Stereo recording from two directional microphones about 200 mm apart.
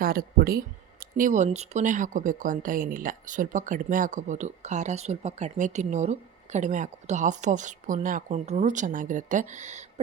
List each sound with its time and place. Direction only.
0.0 s speech: 50° right (ahead or behind)